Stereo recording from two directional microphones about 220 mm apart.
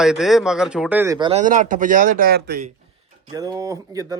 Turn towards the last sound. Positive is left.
turn(degrees=-15)  # may be behind; listen again after turning